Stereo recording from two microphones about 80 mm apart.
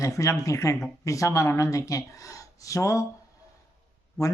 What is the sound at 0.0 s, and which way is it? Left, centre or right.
Speech, left.